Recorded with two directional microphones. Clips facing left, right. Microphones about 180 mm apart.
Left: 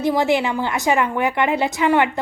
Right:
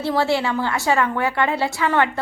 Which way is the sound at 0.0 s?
15° left (ahead or behind).